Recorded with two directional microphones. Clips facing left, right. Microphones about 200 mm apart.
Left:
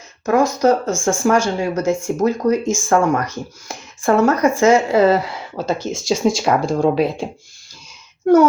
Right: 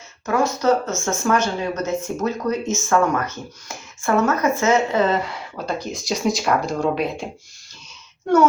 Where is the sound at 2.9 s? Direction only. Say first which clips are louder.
Left 3 dB; 35° left (ahead or behind).